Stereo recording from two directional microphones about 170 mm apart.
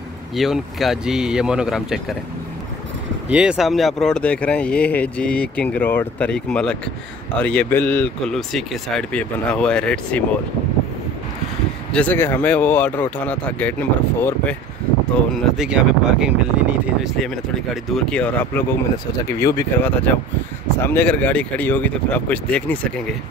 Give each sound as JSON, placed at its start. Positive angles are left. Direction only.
{"t": 0.4, "sound": "speech", "side_deg": 0}
{"t": 3.3, "sound": "speech", "side_deg": -5}
{"t": 11.9, "sound": "speech", "side_deg": 10}
{"t": 15.3, "sound": "speech", "side_deg": -5}
{"t": 17.9, "sound": "speech", "side_deg": 5}